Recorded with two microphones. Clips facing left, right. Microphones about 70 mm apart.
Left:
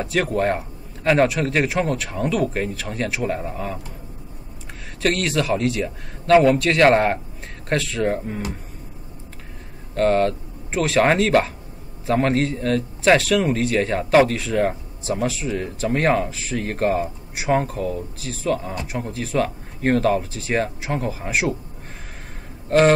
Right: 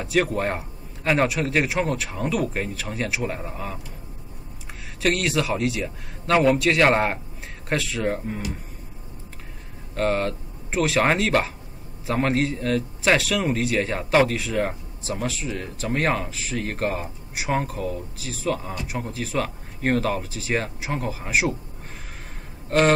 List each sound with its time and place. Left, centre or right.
0.0 s a man's voice: centre
5.0 s a man's voice: centre
9.9 s a man's voice: centre
22.7 s a man's voice: centre